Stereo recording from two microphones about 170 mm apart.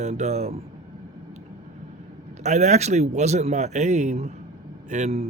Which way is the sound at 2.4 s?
40° right (ahead or behind).